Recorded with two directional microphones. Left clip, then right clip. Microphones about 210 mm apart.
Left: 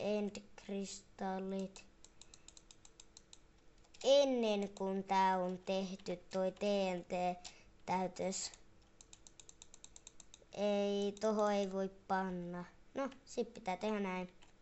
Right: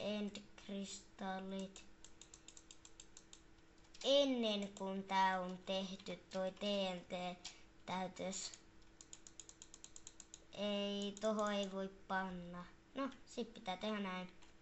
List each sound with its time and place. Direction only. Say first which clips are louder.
0.0 s a sound: left 6 dB; 55° left (ahead or behind)
4.0 s a child's voice: left 4 dB; 55° left (ahead or behind)
10.5 s speech: left 6 dB; 55° left (ahead or behind)